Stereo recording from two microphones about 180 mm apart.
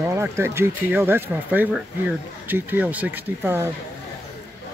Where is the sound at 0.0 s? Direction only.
15° right (ahead or behind).